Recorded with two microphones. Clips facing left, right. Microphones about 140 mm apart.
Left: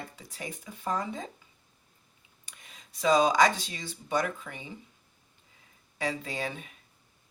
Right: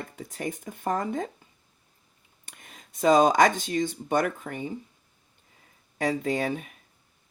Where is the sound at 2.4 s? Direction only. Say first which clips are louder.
Right 4 dB; 55° right (ahead or behind).